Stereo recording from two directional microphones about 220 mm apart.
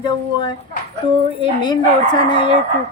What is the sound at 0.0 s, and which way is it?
A woman's voice, 20° left (ahead or behind).